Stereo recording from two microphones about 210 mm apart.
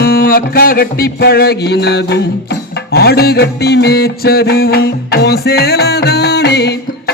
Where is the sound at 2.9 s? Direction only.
50° left (ahead or behind).